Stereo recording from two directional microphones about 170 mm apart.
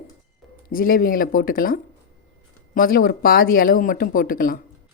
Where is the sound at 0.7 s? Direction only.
55° left (ahead or behind).